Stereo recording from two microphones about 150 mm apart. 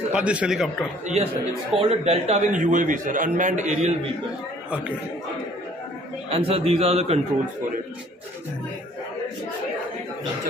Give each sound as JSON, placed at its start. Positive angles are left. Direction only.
{"t": 0.1, "sound": "a man's voice", "side_deg": -10}
{"t": 1.0, "sound": "a man's voice", "side_deg": -45}
{"t": 4.6, "sound": "speech", "side_deg": -10}
{"t": 6.3, "sound": "a man's voice", "side_deg": -40}